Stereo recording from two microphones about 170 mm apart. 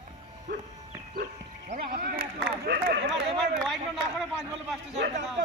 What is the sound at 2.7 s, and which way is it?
Speech, 90° right.